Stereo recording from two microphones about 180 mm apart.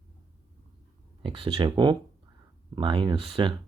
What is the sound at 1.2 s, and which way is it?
Speech, 30° right (ahead or behind).